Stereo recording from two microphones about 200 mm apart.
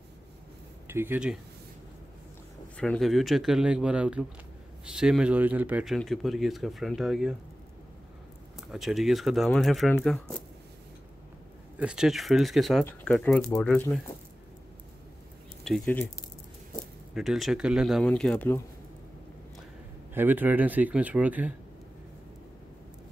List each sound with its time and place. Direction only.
0.8 s speech: 10° right (ahead or behind)
2.8 s speech: centre (ahead or behind)
8.5 s speech: centre (ahead or behind)
11.8 s speech: 5° right (ahead or behind)
15.6 s speech: centre (ahead or behind)
17.1 s speech: centre (ahead or behind)
20.2 s speech: 10° right (ahead or behind)